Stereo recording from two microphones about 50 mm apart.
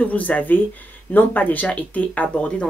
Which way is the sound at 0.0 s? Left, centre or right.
Left.